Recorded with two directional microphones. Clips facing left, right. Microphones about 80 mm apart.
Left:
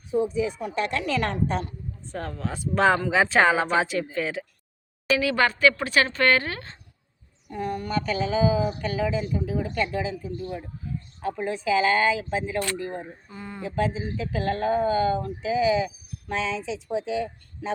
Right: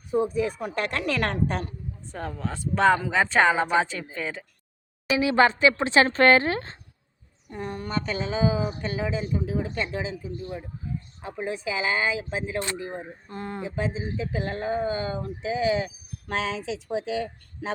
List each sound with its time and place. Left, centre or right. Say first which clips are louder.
0.3 s speech: even; right
2.1 s a woman's voice: left 1 dB; centre
5.1 s speech: right 3 dB; right
11.2 s speech: left 4 dB; centre
13.3 s speech: right 6 dB; right
13.6 s speech: left 4 dB; centre; by 15.9 s right
16.2 s speech: left 1 dB; right